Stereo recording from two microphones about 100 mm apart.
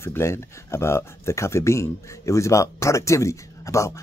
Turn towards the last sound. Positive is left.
turn(degrees=30)  # may be behind; listen again after turning